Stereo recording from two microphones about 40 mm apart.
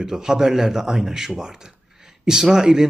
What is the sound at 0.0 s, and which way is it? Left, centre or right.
A man's voice, centre.